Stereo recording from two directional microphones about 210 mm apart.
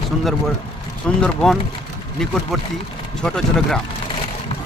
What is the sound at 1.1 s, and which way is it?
Speech, 5° left (ahead or behind).